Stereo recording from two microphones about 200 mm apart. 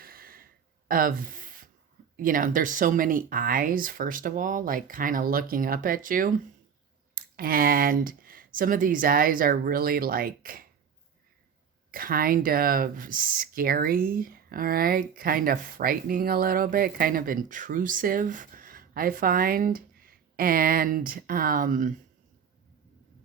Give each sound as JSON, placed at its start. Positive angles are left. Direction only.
{"t": 0.0, "sound": "a sound", "side_deg": -45}
{"t": 2.1, "sound": "speech", "side_deg": -45}
{"t": 11.9, "sound": "speech", "side_deg": -45}